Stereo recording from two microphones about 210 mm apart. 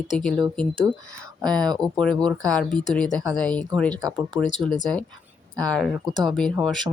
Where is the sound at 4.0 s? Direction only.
20° right (ahead or behind).